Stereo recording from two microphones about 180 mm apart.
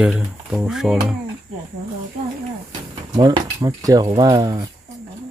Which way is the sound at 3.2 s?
20° right (ahead or behind).